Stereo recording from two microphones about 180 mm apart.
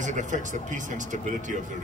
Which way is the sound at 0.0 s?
45° right (ahead or behind).